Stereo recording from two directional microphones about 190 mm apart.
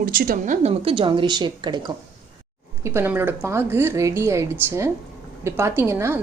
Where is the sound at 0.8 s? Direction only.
30° right (ahead or behind).